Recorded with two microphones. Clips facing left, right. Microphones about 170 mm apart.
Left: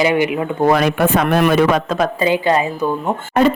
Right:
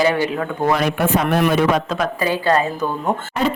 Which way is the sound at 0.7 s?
75° left (ahead or behind).